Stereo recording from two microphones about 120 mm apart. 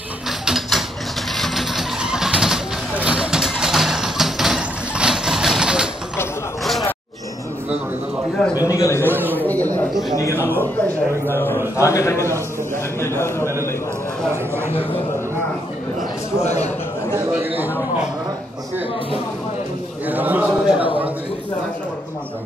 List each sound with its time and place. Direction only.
0.5 s a sound: centre (ahead or behind)
1.3 s vehicle: centre (ahead or behind)
8.5 s a man's voice: 25° left (ahead or behind)
9.0 s speech: 15° right (ahead or behind)
9.5 s a sound: 15° left (ahead or behind)
10.1 s a man's voice: 25° left (ahead or behind)
16.4 s a man's voice: 65° left (ahead or behind)
17.3 s a man's voice: 15° right (ahead or behind)
20.1 s a man's voice: 15° right (ahead or behind)